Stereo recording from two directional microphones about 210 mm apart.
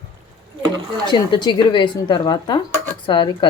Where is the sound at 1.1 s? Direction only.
20° left (ahead or behind).